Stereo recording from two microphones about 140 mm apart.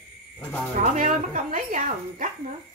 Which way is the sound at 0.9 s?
65° right (ahead or behind).